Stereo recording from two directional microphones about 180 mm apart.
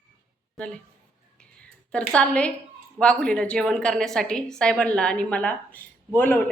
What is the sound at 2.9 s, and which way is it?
A woman's voice, 5° left (ahead or behind).